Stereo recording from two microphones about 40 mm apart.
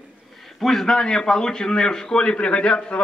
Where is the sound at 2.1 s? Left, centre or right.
Left.